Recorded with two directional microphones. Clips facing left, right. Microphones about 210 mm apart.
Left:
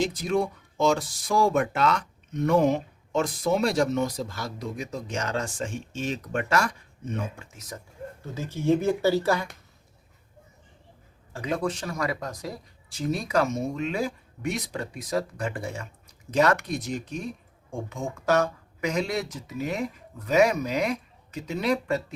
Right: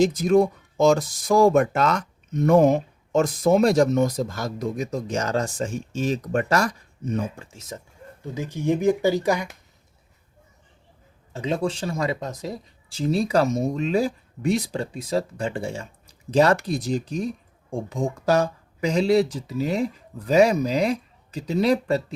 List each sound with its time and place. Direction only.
0.0 s speech: 45° right (ahead or behind); by 7.8 s 25° right (ahead or behind)
8.2 s speech: 15° right (ahead or behind)
11.3 s speech: 25° right (ahead or behind)